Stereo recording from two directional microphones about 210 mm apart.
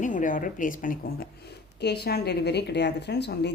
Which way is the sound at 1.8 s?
50° left (ahead or behind).